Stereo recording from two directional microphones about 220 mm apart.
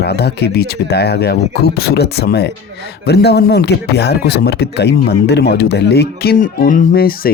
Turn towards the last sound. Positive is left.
turn(degrees=45)  # may be behind; listen again after turning